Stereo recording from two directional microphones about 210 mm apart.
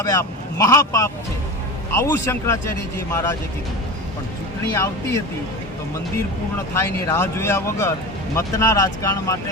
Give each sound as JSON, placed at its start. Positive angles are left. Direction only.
{"t": 0.0, "sound": "speech", "side_deg": 15}
{"t": 4.7, "sound": "speech", "side_deg": 15}
{"t": 6.7, "sound": "speech", "side_deg": 10}